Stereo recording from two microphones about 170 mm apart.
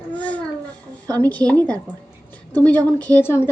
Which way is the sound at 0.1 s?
10° left (ahead or behind).